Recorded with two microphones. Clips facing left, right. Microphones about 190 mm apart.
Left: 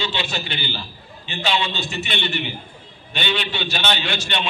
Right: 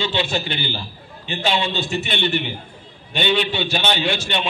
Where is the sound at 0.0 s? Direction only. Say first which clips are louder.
Right 4 dB; 50° right (ahead or behind).